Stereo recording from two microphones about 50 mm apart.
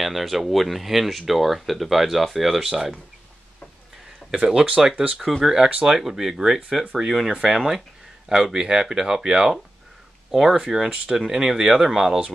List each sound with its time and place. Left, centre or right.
0.0 s speech: centre
4.5 s speech: right
5.4 s speech: centre